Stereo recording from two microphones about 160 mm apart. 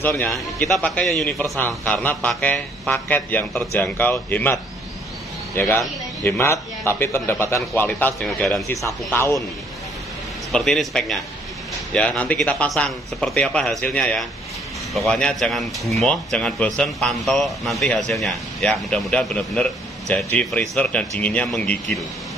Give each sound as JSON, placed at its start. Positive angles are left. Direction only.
{"t": 0.0, "sound": "a man's voice", "side_deg": 15}
{"t": 0.6, "sound": "a man's voice", "side_deg": 5}
{"t": 5.6, "sound": "a man's voice", "side_deg": 15}
{"t": 8.6, "sound": "a man's voice", "side_deg": 15}
{"t": 10.5, "sound": "a man's voice", "side_deg": 0}